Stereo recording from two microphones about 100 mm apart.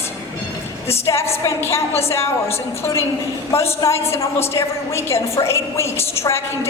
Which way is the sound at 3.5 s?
25° left (ahead or behind).